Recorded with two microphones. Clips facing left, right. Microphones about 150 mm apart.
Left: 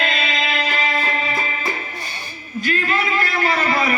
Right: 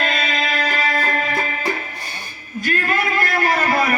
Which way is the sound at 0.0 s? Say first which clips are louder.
Right 1 dB; 45° right (ahead or behind).